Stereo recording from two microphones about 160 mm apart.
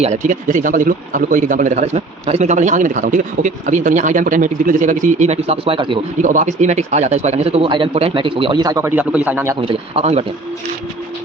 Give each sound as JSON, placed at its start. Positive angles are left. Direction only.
{"t": 0.0, "sound": "a man's voice", "side_deg": -50}
{"t": 6.2, "sound": "a man's voice", "side_deg": -50}
{"t": 8.9, "sound": "a man's voice", "side_deg": -10}
{"t": 9.6, "sound": "a man's voice", "side_deg": -35}